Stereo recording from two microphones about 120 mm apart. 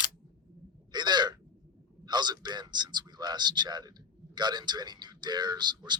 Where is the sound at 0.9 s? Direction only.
35° right (ahead or behind).